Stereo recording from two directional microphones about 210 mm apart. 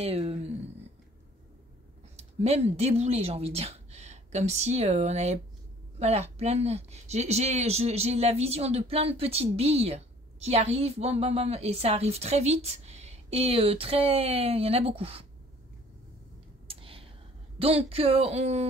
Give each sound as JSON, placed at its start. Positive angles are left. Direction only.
{"t": 0.0, "sound": "speech", "side_deg": -30}
{"t": 2.1, "sound": "speech", "side_deg": -30}
{"t": 16.6, "sound": "whispering", "side_deg": -25}
{"t": 17.6, "sound": "speech", "side_deg": -30}